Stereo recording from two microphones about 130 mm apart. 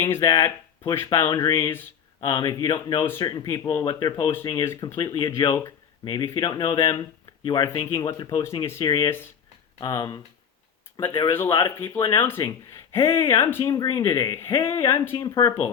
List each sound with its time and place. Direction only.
0.0 s speech: 20° left (ahead or behind)
4.6 s speech: 20° left (ahead or behind)
4.9 s speech: 30° left (ahead or behind)
8.0 s speech: 30° left (ahead or behind)
8.8 s speech: 30° left (ahead or behind)
10.9 s speech: 40° left (ahead or behind)
11.2 s speech: 20° left (ahead or behind)